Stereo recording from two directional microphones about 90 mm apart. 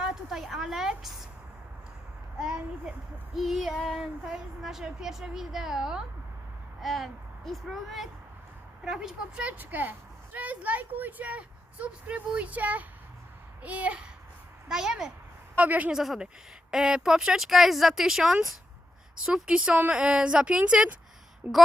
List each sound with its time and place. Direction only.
0.0 s a sound: 5° right (ahead or behind)
2.4 s a child's voice: 10° right (ahead or behind)
15.5 s speech: 15° right (ahead or behind)
16.0 s speech: 5° right (ahead or behind)